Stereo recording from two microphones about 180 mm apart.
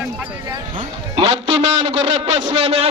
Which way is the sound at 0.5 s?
30° right (ahead or behind).